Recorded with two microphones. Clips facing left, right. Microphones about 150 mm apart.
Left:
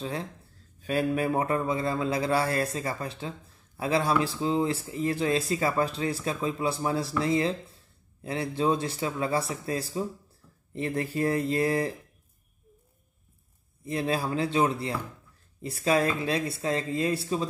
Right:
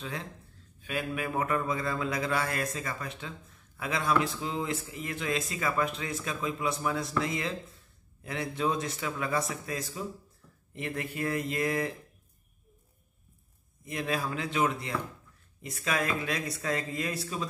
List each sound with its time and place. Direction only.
0.0 s a man's voice: 35° left (ahead or behind)
13.8 s a man's voice: 30° left (ahead or behind)